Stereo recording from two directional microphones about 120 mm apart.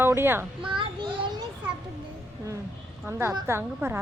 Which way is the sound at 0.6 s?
45° right (ahead or behind).